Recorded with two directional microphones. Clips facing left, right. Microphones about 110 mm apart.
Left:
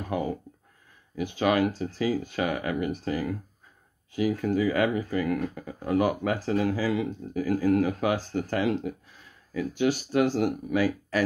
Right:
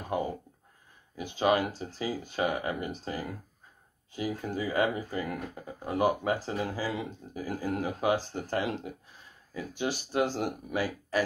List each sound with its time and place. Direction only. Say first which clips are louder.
0.0 s speech: left 2 dB; 25° right (ahead or behind)